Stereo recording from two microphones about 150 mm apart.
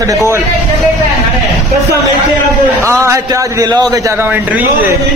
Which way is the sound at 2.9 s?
20° right (ahead or behind).